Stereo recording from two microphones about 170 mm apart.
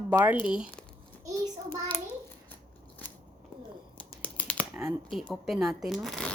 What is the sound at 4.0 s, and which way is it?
Typing, 10° left (ahead or behind).